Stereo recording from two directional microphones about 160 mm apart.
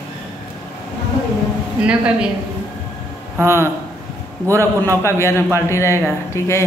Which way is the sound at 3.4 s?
15° right (ahead or behind).